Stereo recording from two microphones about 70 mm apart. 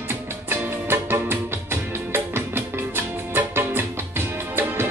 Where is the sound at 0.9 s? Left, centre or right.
Right.